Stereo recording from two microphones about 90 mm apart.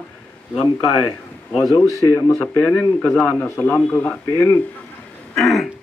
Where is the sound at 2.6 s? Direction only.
15° left (ahead or behind).